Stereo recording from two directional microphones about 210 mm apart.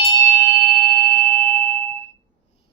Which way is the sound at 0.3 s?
10° left (ahead or behind).